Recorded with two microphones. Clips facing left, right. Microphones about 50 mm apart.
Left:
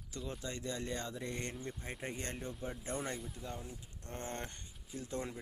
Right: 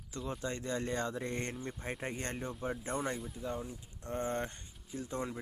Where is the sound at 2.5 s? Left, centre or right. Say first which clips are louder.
Right 4 dB; centre.